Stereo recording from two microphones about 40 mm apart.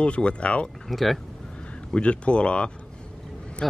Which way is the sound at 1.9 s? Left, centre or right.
Left.